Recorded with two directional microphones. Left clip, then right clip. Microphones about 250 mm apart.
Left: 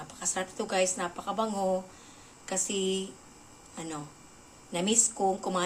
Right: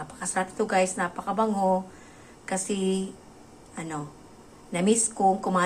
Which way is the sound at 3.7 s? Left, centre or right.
Centre.